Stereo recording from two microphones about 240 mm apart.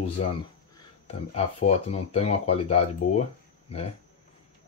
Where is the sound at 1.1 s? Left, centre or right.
Left.